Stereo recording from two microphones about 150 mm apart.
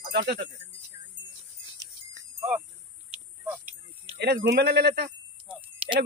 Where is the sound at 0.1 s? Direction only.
90° right.